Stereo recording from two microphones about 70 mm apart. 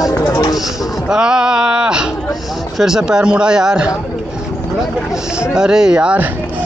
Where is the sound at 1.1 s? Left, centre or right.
Centre.